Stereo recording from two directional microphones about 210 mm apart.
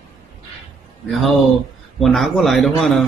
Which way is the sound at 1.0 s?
Centre (ahead or behind).